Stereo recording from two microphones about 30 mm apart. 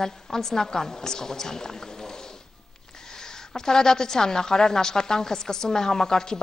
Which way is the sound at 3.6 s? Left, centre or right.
Centre.